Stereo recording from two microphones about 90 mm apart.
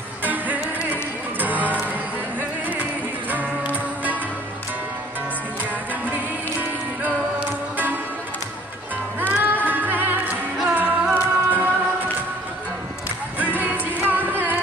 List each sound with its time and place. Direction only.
0.2 s music: 20° right (ahead or behind)
7.0 s music: 20° right (ahead or behind)
9.3 s music: 20° right (ahead or behind)
13.4 s music: 20° right (ahead or behind)